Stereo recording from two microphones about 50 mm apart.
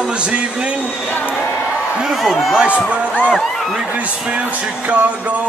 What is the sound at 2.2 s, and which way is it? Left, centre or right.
Speech, centre.